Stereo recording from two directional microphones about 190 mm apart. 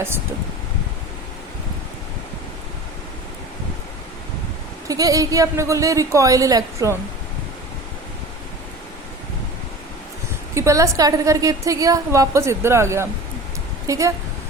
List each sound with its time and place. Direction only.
4.9 s a woman's voice: 20° right (ahead or behind)
10.5 s a woman's voice: 15° right (ahead or behind)